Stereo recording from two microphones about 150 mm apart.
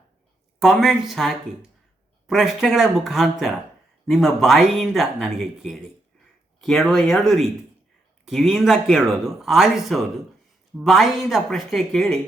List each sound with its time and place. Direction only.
0.6 s speech: centre (ahead or behind)